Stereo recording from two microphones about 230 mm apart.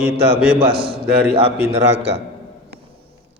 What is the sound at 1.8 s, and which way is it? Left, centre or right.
Speech, right.